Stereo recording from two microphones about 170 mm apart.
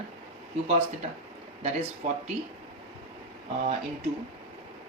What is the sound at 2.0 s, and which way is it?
Speech, 40° right (ahead or behind).